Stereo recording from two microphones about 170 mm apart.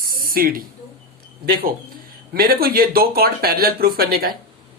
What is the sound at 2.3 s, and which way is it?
Speech, 60° right (ahead or behind).